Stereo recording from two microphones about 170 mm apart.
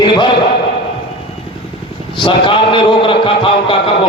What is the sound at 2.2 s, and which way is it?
A man's voice, 30° left (ahead or behind).